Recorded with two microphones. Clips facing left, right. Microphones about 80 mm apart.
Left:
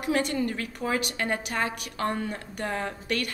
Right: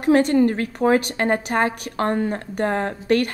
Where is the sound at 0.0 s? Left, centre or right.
Right.